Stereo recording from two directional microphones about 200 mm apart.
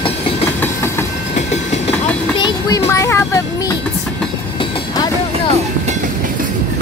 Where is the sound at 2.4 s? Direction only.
20° left (ahead or behind).